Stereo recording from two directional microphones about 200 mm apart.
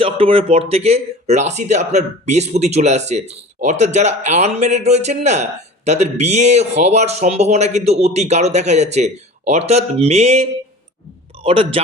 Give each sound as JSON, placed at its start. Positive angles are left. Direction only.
{"t": 0.0, "sound": "speech", "side_deg": -30}
{"t": 11.4, "sound": "a man's voice", "side_deg": -30}